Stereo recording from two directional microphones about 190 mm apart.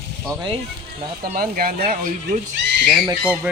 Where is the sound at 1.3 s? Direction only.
50° right (ahead or behind).